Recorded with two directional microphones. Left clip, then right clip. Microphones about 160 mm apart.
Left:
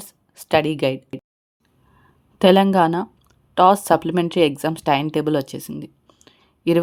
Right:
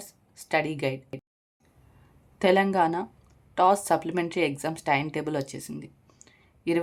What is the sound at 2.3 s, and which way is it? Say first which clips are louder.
Speech: left 7 dB; 40° left (ahead or behind).